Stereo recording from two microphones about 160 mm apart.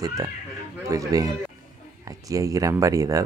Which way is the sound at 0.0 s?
20° right (ahead or behind).